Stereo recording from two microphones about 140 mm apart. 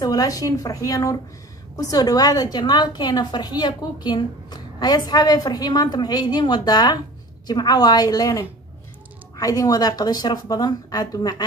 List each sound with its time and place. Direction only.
0.0 s a woman's voice: 25° left (ahead or behind)